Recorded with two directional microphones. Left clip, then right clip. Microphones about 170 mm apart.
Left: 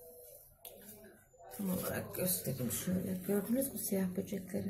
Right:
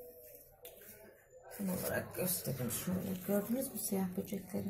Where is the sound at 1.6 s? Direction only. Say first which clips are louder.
Even; 30° left (ahead or behind).